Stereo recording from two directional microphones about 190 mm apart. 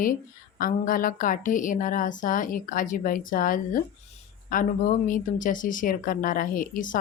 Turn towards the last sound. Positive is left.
turn(degrees=45)  # may be behind; listen again after turning